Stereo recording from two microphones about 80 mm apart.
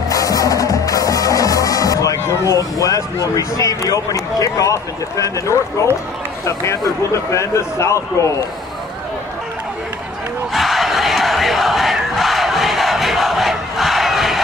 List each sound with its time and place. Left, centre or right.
0.1 s music: left
6.4 s speech: left
10.5 s crowd: centre